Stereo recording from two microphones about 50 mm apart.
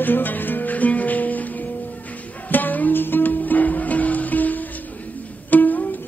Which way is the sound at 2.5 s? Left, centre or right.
Left.